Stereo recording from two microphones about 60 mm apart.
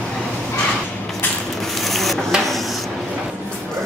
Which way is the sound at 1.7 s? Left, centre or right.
Centre.